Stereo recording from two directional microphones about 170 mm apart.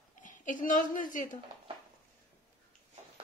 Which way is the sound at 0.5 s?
50° left (ahead or behind).